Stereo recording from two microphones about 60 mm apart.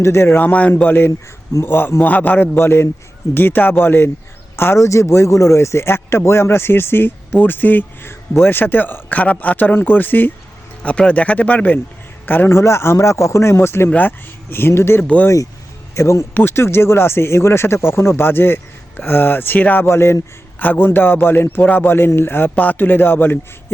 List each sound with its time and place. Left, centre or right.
0.0 s speech: left
0.3 s speech: left
0.8 s speech: left
2.6 s speech: left
4.9 s speech: left
10.8 s a man's voice: left
12.5 s speech: left
16.0 s speech: left
16.3 s speech: left
19.8 s speech: left
20.6 s speech: left